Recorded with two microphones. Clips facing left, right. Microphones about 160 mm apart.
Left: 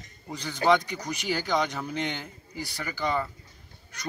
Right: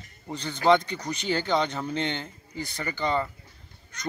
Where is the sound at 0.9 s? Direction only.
10° left (ahead or behind).